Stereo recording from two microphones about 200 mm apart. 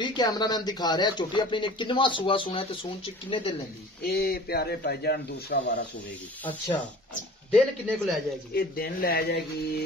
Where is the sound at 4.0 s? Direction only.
50° left (ahead or behind).